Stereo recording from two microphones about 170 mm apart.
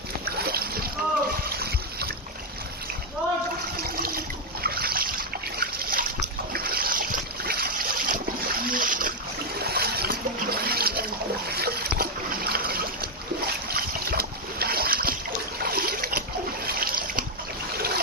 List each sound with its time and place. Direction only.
0.3 s a sound: 65° right (ahead or behind)
1.5 s splash: 65° right (ahead or behind)
3.8 s water: 60° right (ahead or behind)
4.6 s boat: 60° right (ahead or behind)
9.6 s splash: 65° right (ahead or behind)
11.4 s boat: 65° right (ahead or behind)
15.5 s water: 65° right (ahead or behind)
16.6 s splash: 60° right (ahead or behind)
17.7 s trickle: 65° right (ahead or behind)